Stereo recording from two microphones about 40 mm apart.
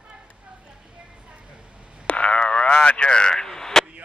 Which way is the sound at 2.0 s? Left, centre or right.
Left.